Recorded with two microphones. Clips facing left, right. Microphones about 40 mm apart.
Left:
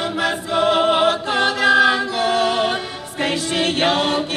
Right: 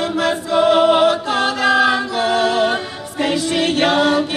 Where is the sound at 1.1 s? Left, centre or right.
Left.